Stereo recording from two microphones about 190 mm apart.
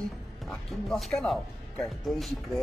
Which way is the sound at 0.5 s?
Centre (ahead or behind).